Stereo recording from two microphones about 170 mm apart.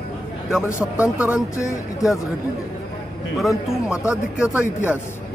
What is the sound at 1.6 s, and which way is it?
Speech, 20° left (ahead or behind).